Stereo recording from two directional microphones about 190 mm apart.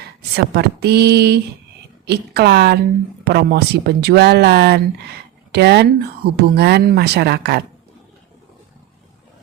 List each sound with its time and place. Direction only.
0.5 s speech: 60° right (ahead or behind)